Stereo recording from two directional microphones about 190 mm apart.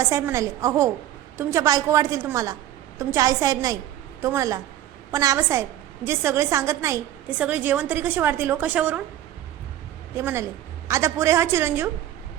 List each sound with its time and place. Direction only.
0.0 s a woman's voice: 15° right (ahead or behind)
10.2 s a woman's voice: 15° right (ahead or behind)